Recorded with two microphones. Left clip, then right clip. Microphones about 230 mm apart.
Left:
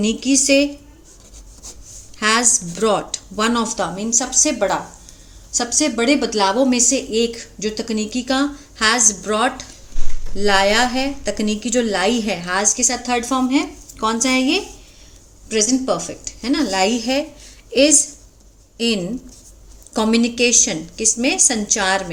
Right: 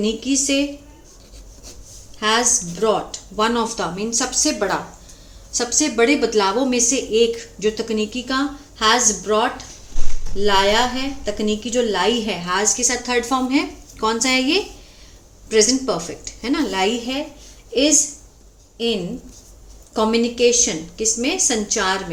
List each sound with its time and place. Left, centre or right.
0.0 s a woman's voice: left
2.1 s a woman's voice: left
19.9 s a woman's voice: left